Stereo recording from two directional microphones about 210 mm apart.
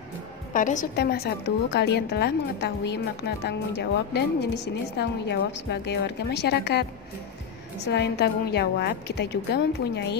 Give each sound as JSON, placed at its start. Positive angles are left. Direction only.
{"t": 0.5, "sound": "a woman's voice", "side_deg": 40}